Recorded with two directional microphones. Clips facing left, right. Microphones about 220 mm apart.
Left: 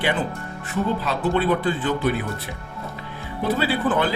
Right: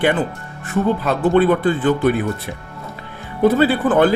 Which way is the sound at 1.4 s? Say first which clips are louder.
Right 7 dB; 50° right (ahead or behind).